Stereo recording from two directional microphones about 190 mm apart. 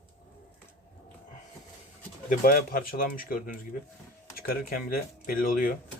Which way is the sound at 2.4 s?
50° left (ahead or behind).